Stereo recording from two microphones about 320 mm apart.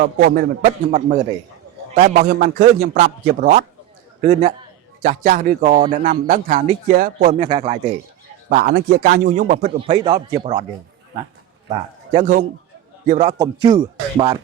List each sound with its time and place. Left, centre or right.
0.0 s speech: right
11.7 s a man's voice: right